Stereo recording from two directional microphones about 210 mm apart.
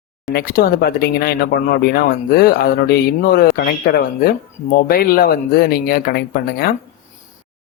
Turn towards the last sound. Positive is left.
turn(degrees=45)  # may be behind; listen again after turning